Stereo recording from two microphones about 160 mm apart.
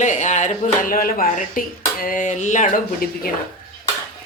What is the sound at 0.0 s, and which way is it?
Speech, 50° left (ahead or behind).